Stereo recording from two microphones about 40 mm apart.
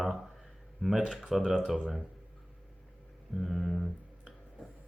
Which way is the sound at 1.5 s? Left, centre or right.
Centre.